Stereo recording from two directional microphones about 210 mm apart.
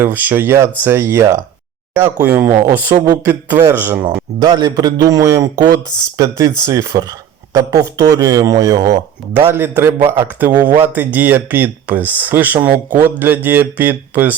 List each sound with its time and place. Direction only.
0.0 s speech: 10° right (ahead or behind)
4.0 s a man's voice: 25° right (ahead or behind); by 14.3 s 10° right (ahead or behind)